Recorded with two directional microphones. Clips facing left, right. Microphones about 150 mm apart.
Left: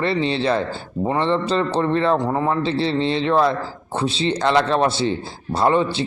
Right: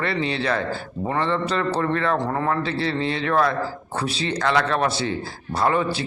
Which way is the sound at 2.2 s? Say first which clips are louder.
Left 3 dB; 15° left (ahead or behind).